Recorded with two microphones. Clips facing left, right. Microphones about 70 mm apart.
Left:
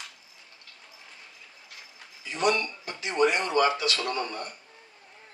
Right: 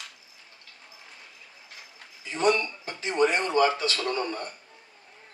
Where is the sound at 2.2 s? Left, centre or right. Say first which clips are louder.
Right 2 dB; right.